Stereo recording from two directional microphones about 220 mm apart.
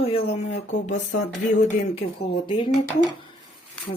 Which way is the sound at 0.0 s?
25° left (ahead or behind).